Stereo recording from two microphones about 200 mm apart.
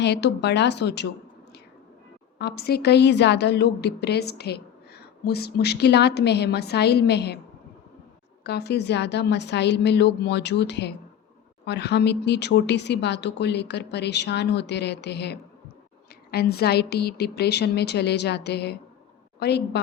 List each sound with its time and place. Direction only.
0.0 s a woman's voice: 60° left (ahead or behind)
2.4 s a woman's voice: 55° left (ahead or behind)
8.4 s a woman's voice: 55° left (ahead or behind)